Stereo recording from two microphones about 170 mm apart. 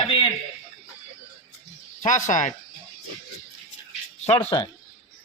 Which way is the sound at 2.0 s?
50° left (ahead or behind).